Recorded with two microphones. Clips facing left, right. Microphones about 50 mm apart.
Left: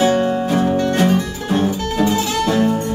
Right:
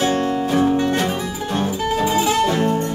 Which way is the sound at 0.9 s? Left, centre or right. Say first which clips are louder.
Left 5 dB; centre.